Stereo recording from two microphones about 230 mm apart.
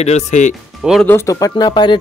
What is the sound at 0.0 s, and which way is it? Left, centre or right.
Speech, left.